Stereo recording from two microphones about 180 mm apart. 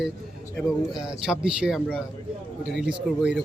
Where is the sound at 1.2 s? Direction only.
5° right (ahead or behind).